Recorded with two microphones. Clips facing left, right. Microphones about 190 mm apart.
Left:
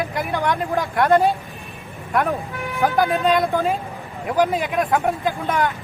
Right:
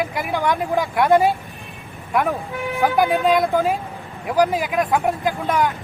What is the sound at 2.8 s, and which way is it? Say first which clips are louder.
Speech: right 1 dB; centre (ahead or behind).